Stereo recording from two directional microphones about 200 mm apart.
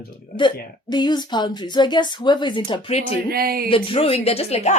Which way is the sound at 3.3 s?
50° right (ahead or behind).